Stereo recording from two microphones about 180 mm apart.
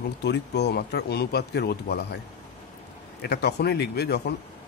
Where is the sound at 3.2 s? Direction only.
65° left (ahead or behind).